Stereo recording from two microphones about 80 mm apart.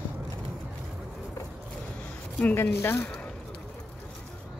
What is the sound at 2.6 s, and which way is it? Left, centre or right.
Speech, left.